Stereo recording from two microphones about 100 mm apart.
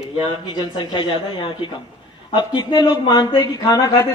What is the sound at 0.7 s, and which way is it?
Speech, 55° left (ahead or behind).